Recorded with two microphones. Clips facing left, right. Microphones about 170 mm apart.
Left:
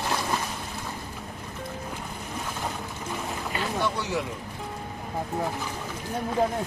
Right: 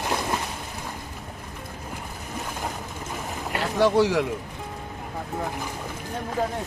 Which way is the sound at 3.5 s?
80° right.